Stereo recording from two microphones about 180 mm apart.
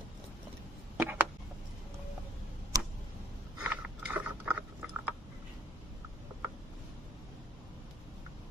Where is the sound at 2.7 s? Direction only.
20° right (ahead or behind).